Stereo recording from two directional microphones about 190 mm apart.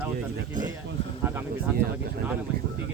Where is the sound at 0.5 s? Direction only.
40° right (ahead or behind).